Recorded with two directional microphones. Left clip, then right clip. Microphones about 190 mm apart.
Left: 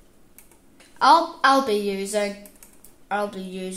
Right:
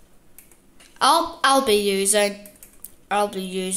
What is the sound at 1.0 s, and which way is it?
A woman's voice, 15° right (ahead or behind).